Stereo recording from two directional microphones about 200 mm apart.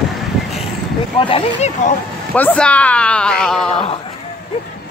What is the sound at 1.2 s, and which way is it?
Speech, 25° left (ahead or behind).